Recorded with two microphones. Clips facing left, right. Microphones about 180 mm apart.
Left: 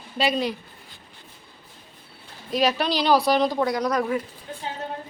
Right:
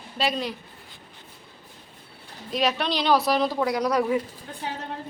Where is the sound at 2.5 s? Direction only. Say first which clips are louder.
Left 2 dB; centre (ahead or behind).